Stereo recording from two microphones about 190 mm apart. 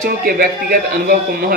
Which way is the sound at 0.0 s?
50° right (ahead or behind).